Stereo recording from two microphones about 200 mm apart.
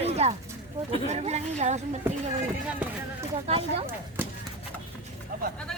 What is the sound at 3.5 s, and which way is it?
Speech, 30° right (ahead or behind).